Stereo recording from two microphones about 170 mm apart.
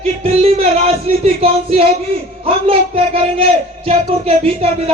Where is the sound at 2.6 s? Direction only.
35° right (ahead or behind).